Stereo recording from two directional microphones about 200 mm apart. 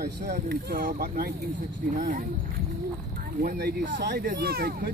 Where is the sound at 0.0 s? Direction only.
40° right (ahead or behind).